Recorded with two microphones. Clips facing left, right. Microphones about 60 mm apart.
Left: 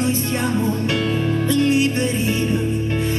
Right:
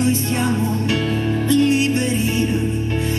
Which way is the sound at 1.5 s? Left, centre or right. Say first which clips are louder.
Right 2 dB; left.